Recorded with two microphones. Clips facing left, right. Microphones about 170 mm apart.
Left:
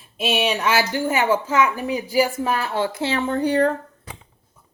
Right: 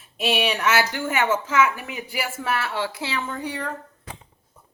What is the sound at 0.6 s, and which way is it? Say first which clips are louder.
A woman's voice: left 2 dB; 35° left (ahead or behind).